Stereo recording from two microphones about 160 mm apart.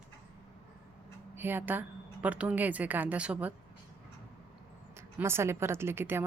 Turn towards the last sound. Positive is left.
turn(degrees=-15)  # may be behind; listen again after turning